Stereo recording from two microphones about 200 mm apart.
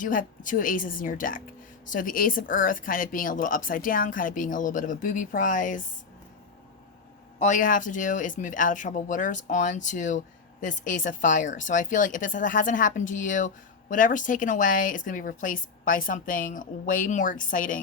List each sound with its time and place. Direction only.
0.0 s a woman's voice: 40° left (ahead or behind)
7.3 s speech: 40° left (ahead or behind)